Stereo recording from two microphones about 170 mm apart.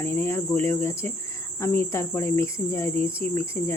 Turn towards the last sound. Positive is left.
turn(degrees=15)  # may be behind; listen again after turning